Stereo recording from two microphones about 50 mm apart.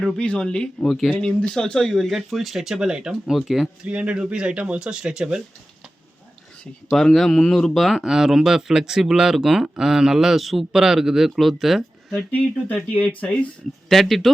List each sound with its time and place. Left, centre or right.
0.2 s speech: centre
0.9 s speech: centre
1.2 s speech: centre
3.8 s speech: right
6.9 s speech: centre
12.3 s speech: left
13.9 s speech: centre